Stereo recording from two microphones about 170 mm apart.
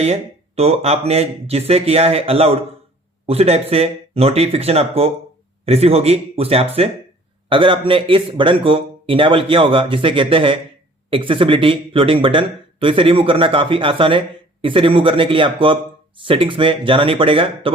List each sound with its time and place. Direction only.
0.0 s a man's voice: 35° right (ahead or behind)